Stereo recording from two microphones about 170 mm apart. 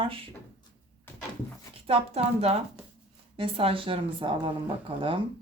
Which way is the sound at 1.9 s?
40° right (ahead or behind).